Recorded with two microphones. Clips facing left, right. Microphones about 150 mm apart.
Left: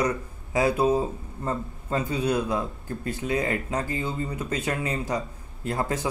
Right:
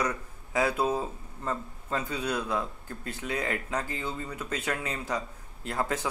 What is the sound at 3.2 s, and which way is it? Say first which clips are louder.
Speech: left 6 dB; 35° left (ahead or behind).